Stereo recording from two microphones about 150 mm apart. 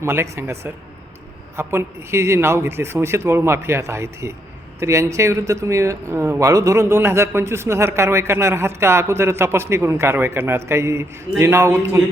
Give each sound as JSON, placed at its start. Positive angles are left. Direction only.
{"t": 0.0, "sound": "speech", "side_deg": -15}